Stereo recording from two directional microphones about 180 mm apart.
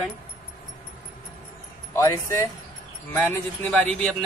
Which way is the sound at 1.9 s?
15° left (ahead or behind).